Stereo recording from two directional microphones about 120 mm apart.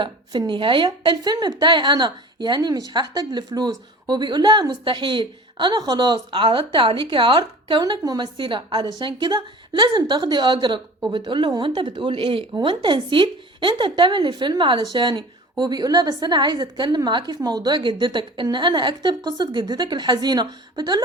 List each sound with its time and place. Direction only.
0.0 s a woman's voice: 40° right (ahead or behind)